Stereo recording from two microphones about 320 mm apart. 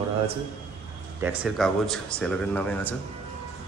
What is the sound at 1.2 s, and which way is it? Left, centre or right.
A man's voice, centre.